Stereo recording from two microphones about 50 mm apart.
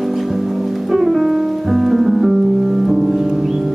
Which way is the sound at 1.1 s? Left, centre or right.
Centre.